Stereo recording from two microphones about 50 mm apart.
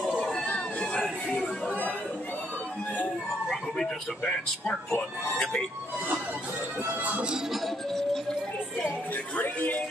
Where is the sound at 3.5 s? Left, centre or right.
Centre.